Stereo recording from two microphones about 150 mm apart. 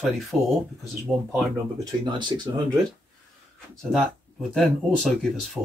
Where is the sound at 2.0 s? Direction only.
30° right (ahead or behind).